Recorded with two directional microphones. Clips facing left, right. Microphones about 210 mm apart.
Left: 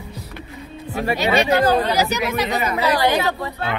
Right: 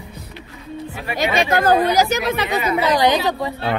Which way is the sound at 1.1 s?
50° right (ahead or behind).